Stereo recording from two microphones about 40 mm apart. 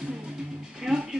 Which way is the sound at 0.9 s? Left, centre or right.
Centre.